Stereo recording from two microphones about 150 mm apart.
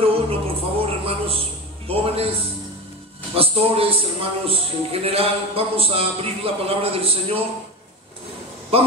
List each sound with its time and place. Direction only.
0.0 s music: 40° right (ahead or behind)
1.9 s a man's voice: 40° right (ahead or behind)
8.7 s a man's voice: 40° right (ahead or behind)